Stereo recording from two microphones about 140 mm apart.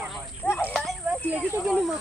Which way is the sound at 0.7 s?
5° left (ahead or behind).